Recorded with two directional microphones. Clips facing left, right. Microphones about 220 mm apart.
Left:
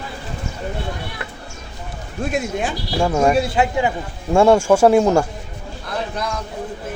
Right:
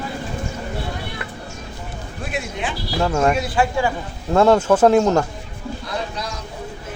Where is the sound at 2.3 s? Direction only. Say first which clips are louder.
Left 4 dB; 45° left (ahead or behind).